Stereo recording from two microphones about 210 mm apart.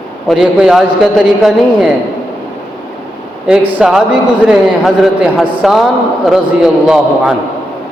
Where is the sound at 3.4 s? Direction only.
5° right (ahead or behind).